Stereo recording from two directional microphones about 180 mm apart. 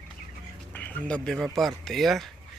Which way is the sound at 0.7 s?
10° left (ahead or behind).